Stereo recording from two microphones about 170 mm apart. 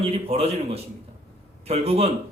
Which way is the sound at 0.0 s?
35° right (ahead or behind).